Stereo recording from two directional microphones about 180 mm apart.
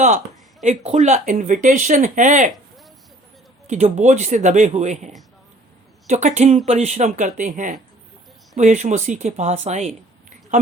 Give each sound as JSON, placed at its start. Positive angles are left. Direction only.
{"t": 0.6, "sound": "speech", "side_deg": -40}
{"t": 3.7, "sound": "speech", "side_deg": -40}